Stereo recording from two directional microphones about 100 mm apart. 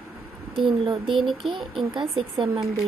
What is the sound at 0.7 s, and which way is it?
Speech, 60° right (ahead or behind).